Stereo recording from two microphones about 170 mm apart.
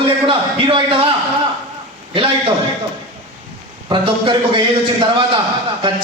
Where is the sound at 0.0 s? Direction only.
30° right (ahead or behind).